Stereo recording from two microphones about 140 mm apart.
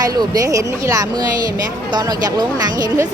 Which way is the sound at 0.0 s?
25° right (ahead or behind).